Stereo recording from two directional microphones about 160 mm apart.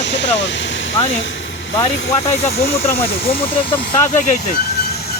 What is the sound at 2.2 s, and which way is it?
Speech, 40° left (ahead or behind).